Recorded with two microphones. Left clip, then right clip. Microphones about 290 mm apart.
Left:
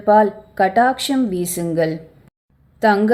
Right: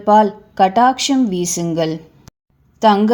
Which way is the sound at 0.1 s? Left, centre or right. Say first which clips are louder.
Right 1 dB; right.